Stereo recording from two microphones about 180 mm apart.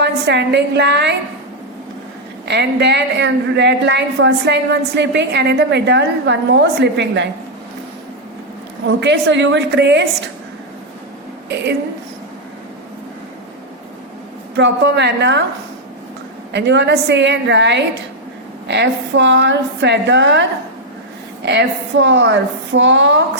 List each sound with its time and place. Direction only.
0.0 s a woman's voice: 70° right (ahead or behind)
2.5 s a woman's voice: 70° right (ahead or behind)
8.9 s a woman's voice: 80° right
14.5 s a woman's voice: 75° right (ahead or behind)
16.5 s a woman's voice: 75° right (ahead or behind)